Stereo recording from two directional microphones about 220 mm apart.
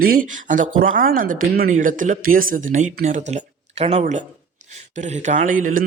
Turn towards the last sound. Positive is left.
turn(degrees=-35)  # may be behind; listen again after turning